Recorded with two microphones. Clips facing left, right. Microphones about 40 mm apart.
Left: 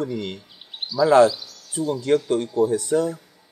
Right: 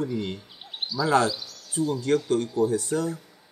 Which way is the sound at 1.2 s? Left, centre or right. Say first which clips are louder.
Left 6 dB; centre.